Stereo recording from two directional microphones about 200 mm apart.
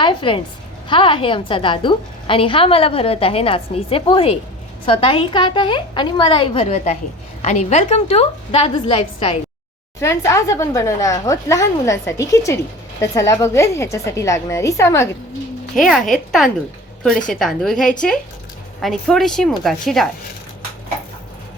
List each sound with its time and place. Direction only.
0.0 s a woman's voice: 25° left (ahead or behind)
10.0 s speech: 15° left (ahead or behind)
15.7 s a woman's voice: centre (ahead or behind)
17.2 s a woman's voice: centre (ahead or behind)